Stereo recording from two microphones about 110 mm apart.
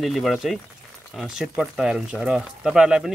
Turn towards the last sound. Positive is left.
turn(degrees=-5)  # may be behind; listen again after turning